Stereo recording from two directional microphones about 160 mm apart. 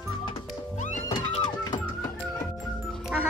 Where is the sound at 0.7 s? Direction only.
50° left (ahead or behind).